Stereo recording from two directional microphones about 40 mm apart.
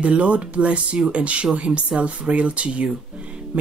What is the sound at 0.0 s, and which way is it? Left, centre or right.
Speech, right.